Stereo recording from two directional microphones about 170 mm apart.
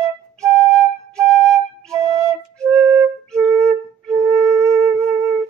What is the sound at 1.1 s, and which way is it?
Flute, 5° left (ahead or behind).